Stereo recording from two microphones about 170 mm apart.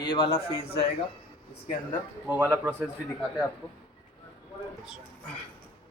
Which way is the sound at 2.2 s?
10° right (ahead or behind).